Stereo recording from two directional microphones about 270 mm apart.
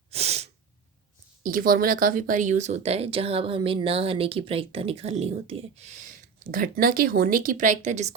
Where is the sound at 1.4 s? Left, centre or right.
Right.